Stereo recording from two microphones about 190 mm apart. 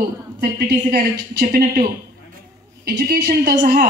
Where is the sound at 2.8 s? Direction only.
55° right (ahead or behind).